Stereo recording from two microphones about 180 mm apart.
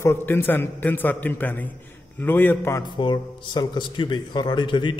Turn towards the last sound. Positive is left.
turn(degrees=25)  # may be behind; listen again after turning